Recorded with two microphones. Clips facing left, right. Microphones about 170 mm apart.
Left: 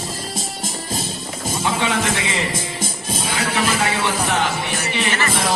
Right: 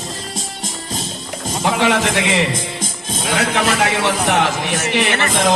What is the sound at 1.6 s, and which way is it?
A man's voice, 70° right (ahead or behind).